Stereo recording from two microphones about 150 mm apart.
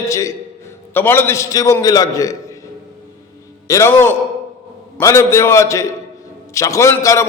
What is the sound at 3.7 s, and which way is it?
A man's voice, 15° left (ahead or behind).